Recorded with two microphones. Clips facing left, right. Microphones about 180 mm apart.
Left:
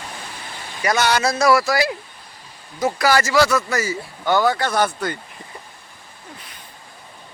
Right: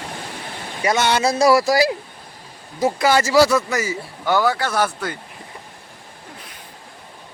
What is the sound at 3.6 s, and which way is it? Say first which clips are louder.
Speech: even; 15° right (ahead or behind).